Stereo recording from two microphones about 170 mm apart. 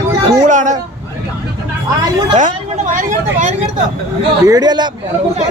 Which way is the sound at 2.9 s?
50° right (ahead or behind).